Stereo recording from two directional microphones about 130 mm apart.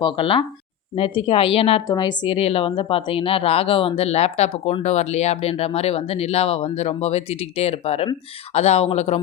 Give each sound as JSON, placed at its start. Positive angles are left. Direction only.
{"t": 0.0, "sound": "a woman's voice", "side_deg": 40}
{"t": 1.9, "sound": "a woman's voice", "side_deg": 35}